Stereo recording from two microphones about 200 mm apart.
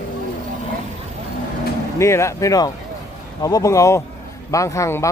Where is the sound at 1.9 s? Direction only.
15° left (ahead or behind).